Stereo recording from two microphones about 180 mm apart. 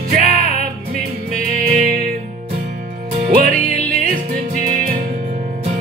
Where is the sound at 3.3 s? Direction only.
55° right (ahead or behind).